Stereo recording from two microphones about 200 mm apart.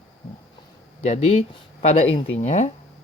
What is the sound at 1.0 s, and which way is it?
Speech, 35° left (ahead or behind).